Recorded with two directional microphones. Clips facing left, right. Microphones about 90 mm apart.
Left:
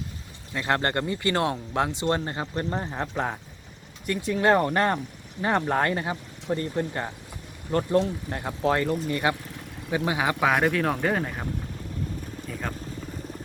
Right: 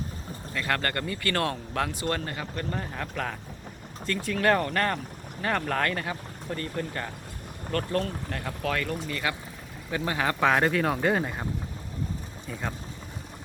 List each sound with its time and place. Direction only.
0.5 s speech: 25° left (ahead or behind)
9.9 s speech: 15° left (ahead or behind); by 11.4 s 5° right (ahead or behind)
12.5 s speech: centre (ahead or behind)